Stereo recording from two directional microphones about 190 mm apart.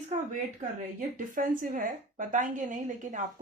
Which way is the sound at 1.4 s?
45° right (ahead or behind).